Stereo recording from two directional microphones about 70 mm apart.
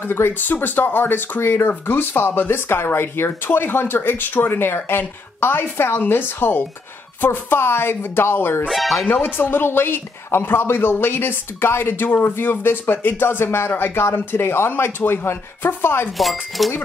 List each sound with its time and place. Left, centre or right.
0.0 s speech: left
8.6 s speech: centre
9.0 s speech: left
16.2 s speech: centre